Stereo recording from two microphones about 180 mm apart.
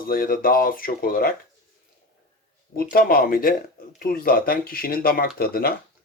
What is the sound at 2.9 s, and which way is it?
Speech, 55° left (ahead or behind).